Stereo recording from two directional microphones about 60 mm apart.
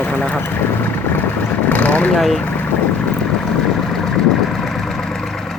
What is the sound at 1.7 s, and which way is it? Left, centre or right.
Vehicle, left.